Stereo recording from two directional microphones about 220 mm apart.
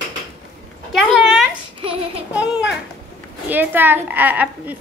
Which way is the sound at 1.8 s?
25° right (ahead or behind).